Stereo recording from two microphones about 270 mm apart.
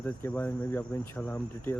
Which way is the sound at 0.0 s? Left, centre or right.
Centre.